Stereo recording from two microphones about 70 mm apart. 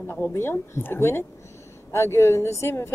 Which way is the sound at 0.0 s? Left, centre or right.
Left.